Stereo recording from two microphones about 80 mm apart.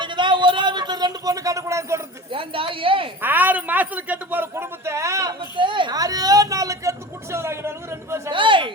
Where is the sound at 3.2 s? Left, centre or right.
Right.